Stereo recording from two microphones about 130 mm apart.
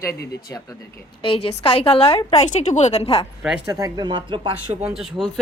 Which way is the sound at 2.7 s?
60° left (ahead or behind).